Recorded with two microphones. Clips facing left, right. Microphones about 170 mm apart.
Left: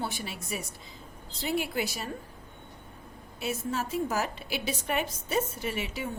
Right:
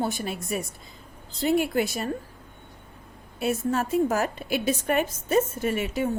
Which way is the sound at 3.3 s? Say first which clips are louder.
Right 7 dB; 55° right (ahead or behind).